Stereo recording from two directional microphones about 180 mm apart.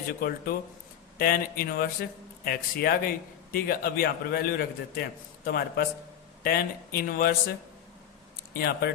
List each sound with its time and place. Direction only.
0.1 s speech: 55° left (ahead or behind)
8.5 s speech: 60° left (ahead or behind)